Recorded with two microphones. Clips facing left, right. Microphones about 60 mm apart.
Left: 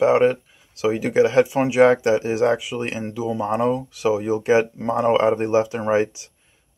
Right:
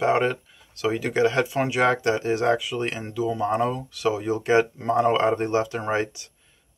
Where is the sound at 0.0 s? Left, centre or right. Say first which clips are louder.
Left 5 dB; centre.